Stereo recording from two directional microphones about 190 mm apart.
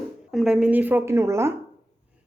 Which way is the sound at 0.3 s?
5° right (ahead or behind).